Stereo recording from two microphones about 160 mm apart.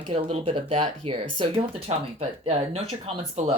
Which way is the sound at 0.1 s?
35° right (ahead or behind).